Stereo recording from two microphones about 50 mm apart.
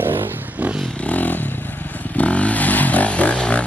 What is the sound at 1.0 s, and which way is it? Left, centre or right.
Vehicle, left.